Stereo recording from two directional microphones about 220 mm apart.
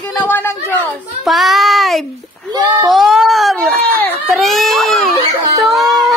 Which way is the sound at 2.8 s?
Centre (ahead or behind).